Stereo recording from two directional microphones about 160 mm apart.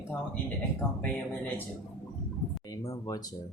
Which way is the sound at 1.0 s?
10° left (ahead or behind).